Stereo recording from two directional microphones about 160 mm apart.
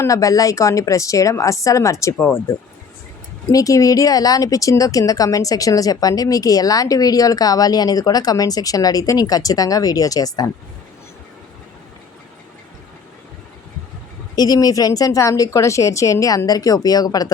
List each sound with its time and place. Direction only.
0.0 s speech: 20° left (ahead or behind)
14.3 s speech: 25° left (ahead or behind)